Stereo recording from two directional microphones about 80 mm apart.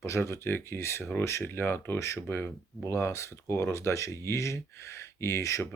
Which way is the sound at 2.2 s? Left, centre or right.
Left.